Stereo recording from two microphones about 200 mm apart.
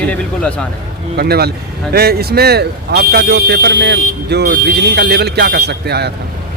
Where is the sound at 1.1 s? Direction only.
50° right (ahead or behind).